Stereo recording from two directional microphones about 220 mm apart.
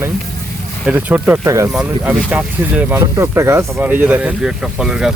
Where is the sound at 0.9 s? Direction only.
5° right (ahead or behind).